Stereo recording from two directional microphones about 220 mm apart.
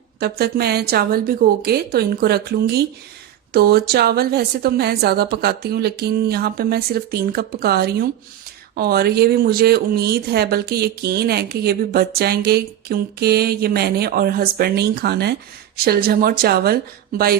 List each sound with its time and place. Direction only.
0.2 s speech: 45° right (ahead or behind)